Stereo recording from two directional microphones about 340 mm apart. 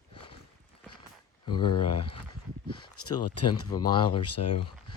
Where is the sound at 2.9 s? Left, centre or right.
Left.